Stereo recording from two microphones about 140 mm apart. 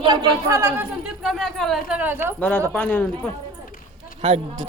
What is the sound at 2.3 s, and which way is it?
Speech, 10° left (ahead or behind).